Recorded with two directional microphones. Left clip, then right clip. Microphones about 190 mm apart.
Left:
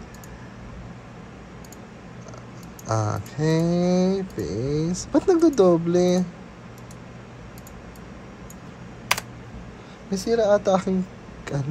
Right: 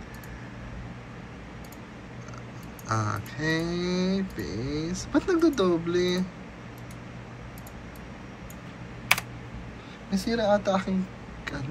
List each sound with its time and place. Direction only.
2.9 s speech: 35° left (ahead or behind)
10.1 s speech: 55° left (ahead or behind)